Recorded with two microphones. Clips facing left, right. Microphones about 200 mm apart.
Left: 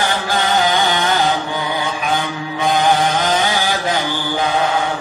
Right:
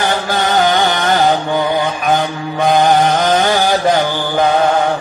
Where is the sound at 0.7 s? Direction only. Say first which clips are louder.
Right 3 dB; 50° right (ahead or behind).